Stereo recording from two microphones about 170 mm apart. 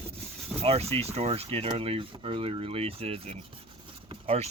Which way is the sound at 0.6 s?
35° right (ahead or behind).